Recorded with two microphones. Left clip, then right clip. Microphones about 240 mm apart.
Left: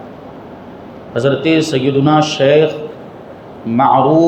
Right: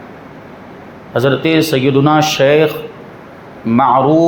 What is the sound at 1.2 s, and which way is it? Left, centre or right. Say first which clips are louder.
A man's voice: right 1 dB; right.